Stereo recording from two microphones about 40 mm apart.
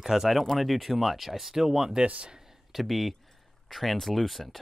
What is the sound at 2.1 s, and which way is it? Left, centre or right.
Speech, right.